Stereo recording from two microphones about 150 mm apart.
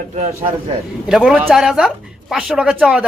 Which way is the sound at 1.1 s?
Centre (ahead or behind).